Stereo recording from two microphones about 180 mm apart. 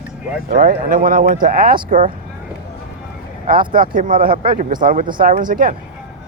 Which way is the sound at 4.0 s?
50° right (ahead or behind).